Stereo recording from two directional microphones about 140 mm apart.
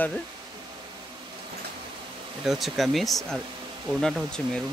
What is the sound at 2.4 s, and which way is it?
Speech, centre (ahead or behind).